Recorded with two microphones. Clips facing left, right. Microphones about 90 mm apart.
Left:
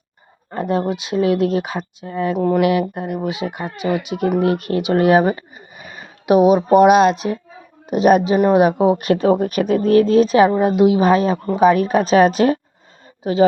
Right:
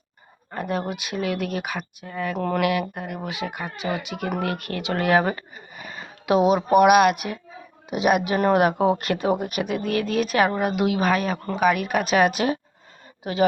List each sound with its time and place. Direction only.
0.5 s speech: 25° left (ahead or behind)
7.9 s speech: 40° left (ahead or behind)
8.4 s speech: 20° left (ahead or behind)
9.1 s speech: 35° left (ahead or behind)